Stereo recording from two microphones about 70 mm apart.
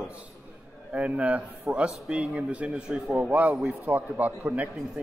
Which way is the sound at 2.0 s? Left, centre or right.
Centre.